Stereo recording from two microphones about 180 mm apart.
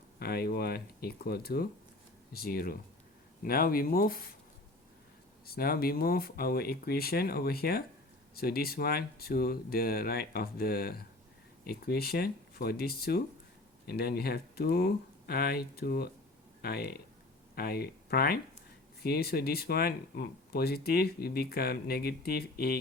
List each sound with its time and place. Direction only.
0.2 s speech: 60° left (ahead or behind)
5.5 s speech: 55° left (ahead or behind)